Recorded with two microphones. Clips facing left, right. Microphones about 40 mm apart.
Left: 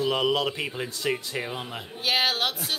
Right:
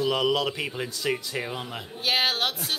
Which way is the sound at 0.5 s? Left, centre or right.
Centre.